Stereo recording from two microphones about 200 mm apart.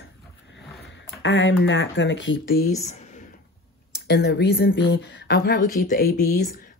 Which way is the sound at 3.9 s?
50° left (ahead or behind).